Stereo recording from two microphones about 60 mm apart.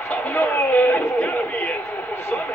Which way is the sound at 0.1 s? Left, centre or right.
Left.